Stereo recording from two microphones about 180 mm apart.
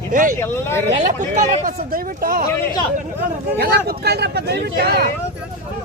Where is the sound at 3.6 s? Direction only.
60° right (ahead or behind).